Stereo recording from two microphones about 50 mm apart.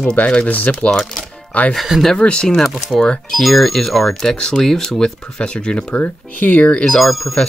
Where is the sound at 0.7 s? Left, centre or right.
Centre.